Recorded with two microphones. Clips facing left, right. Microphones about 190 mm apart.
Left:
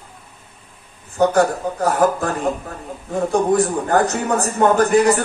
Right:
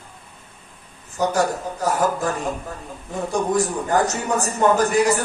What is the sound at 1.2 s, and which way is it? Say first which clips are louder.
Speech: left 6 dB; 60° left (ahead or behind).